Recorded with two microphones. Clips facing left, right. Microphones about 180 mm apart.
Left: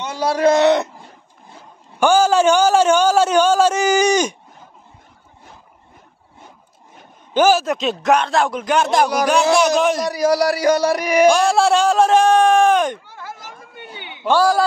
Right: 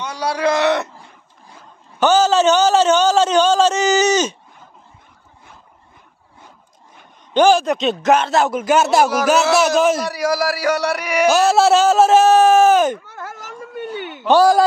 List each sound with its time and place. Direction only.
0.3 s a sound: 25° left (ahead or behind)
2.0 s a man's voice: 10° left (ahead or behind)
7.3 s a man's voice: 5° left (ahead or behind)
10.2 s speech: 20° left (ahead or behind)
11.2 s a man's voice: 5° right (ahead or behind)
13.0 s a sound: 75° right (ahead or behind)
14.2 s speech: 15° right (ahead or behind)